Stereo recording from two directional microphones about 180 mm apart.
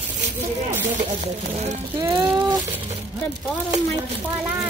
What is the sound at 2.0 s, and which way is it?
Speech, 25° right (ahead or behind).